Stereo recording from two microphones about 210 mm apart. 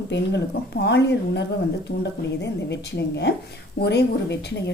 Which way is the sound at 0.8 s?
55° left (ahead or behind).